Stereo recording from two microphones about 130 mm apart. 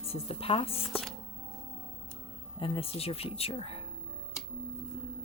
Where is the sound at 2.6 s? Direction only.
45° left (ahead or behind).